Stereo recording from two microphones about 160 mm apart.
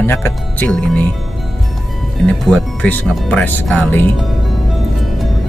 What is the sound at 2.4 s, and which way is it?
Speech, 5° left (ahead or behind).